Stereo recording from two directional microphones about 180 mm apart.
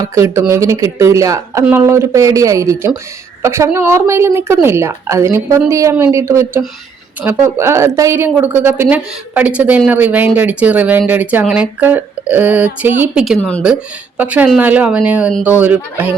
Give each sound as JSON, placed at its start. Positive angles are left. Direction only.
{"t": 0.0, "sound": "speech", "side_deg": -15}